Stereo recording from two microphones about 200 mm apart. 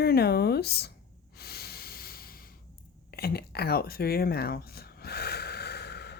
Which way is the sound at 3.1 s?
50° left (ahead or behind).